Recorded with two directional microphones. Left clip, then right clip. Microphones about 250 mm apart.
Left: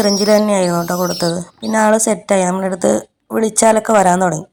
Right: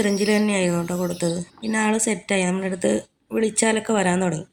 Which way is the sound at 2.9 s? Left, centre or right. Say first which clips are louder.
Left 7 dB; centre.